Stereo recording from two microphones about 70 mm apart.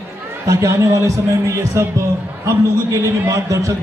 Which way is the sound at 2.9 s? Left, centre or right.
Right.